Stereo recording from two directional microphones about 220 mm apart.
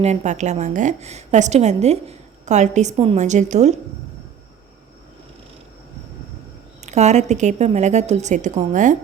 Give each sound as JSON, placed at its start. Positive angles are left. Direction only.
{"t": 0.0, "sound": "a woman's voice", "side_deg": -30}
{"t": 6.8, "sound": "a woman's voice", "side_deg": -30}